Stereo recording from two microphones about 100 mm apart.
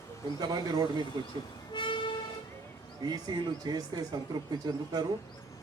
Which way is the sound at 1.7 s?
55° left (ahead or behind).